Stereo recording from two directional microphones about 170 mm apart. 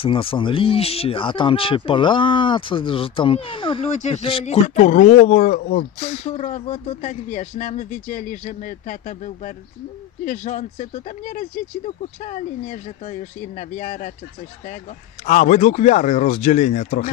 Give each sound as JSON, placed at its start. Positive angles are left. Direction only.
{"t": 0.0, "sound": "speech", "side_deg": 30}
{"t": 3.9, "sound": "speech", "side_deg": 40}
{"t": 4.6, "sound": "speech", "side_deg": 45}
{"t": 5.6, "sound": "speech", "side_deg": 60}
{"t": 5.9, "sound": "speech", "side_deg": 35}
{"t": 15.2, "sound": "speech", "side_deg": 45}